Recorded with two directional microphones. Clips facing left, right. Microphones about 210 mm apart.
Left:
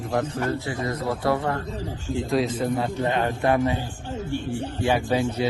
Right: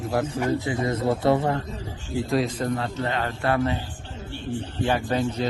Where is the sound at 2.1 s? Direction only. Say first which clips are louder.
Even; centre (ahead or behind).